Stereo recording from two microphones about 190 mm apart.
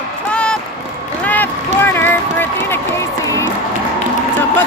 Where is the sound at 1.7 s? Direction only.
10° left (ahead or behind).